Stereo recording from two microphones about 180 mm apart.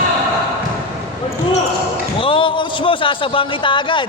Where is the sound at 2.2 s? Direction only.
30° left (ahead or behind).